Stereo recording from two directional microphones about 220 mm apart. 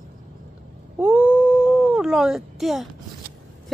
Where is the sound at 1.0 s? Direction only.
5° right (ahead or behind).